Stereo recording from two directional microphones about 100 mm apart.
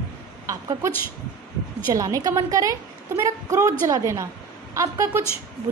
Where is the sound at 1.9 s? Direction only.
35° right (ahead or behind).